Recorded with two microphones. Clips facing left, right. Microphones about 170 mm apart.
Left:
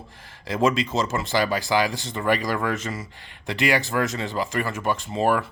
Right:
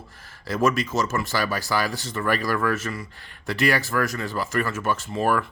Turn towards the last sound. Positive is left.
turn(degrees=15)  # may be behind; listen again after turning